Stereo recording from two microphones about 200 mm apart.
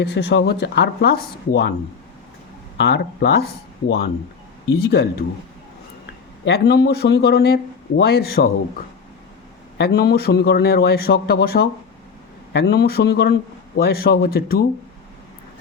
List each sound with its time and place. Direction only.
0.0 s speech: 60° left (ahead or behind)
2.7 s a man's voice: 55° left (ahead or behind)
6.4 s a man's voice: 55° left (ahead or behind)
9.7 s a man's voice: 55° left (ahead or behind)